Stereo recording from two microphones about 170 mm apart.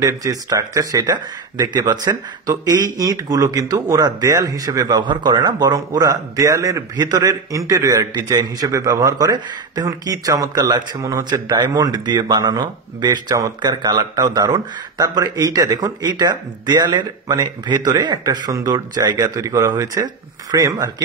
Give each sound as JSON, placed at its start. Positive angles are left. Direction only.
{"t": 0.0, "sound": "speech", "side_deg": -20}